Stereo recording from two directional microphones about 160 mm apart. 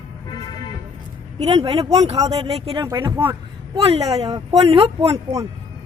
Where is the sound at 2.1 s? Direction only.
25° right (ahead or behind).